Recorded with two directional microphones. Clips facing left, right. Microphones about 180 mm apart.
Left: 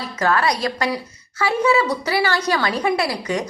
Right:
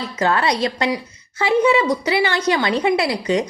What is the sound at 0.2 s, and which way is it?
A woman's voice, 25° right (ahead or behind).